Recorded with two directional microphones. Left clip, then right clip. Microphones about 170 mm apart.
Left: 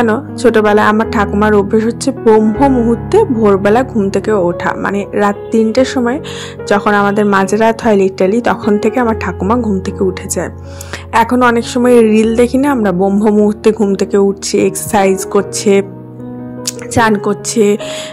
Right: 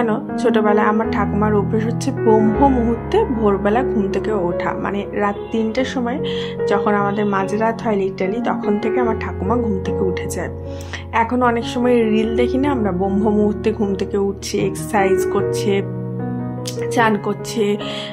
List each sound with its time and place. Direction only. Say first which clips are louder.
0.0 s speech: left 7 dB; 35° left (ahead or behind)
16.9 s speech: left 6 dB; 35° left (ahead or behind)